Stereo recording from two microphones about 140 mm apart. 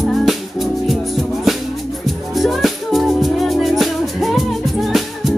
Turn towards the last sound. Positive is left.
turn(degrees=0)  # may be behind; listen again after turning